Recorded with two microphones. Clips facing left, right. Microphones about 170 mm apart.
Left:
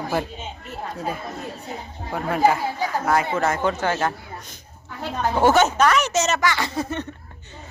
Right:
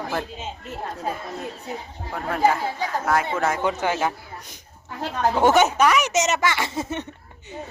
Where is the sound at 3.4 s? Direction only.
10° right (ahead or behind).